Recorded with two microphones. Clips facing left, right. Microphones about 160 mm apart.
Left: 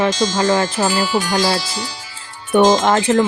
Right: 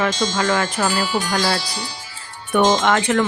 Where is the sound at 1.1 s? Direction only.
90° left.